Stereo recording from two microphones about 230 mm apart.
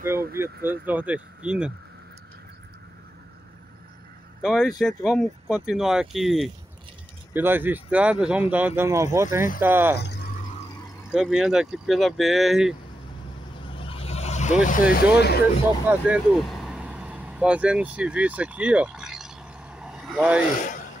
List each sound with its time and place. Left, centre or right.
0.7 s speech: centre
4.4 s speech: centre
9.9 s a sound: left
11.1 s speech: centre
13.7 s vehicle: left
15.9 s vehicle: centre